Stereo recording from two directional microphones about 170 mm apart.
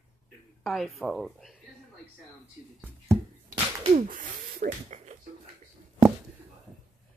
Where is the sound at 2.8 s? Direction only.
15° right (ahead or behind).